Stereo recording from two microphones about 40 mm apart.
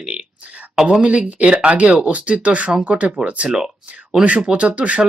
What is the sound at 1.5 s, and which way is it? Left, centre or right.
Speech, right.